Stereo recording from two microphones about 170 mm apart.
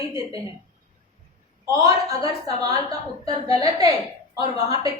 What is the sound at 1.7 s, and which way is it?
A woman's voice, 20° right (ahead or behind).